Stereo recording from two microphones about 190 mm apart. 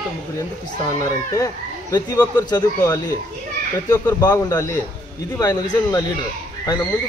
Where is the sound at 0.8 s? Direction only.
15° left (ahead or behind).